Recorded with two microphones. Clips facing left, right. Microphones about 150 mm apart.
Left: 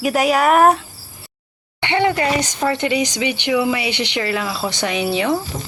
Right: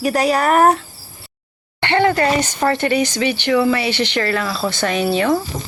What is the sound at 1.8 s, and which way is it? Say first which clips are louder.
Speech: right 2 dB; 15° left (ahead or behind).